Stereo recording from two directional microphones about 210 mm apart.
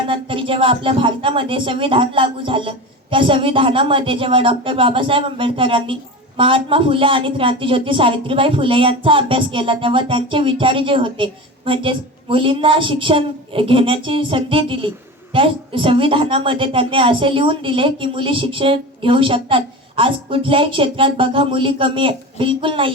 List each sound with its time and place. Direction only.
0.1 s speech: 25° right (ahead or behind)